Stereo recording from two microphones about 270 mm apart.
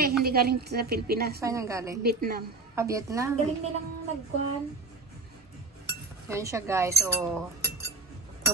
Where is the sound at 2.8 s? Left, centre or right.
Centre.